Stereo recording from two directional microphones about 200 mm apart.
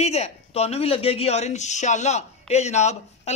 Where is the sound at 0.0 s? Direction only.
30° left (ahead or behind).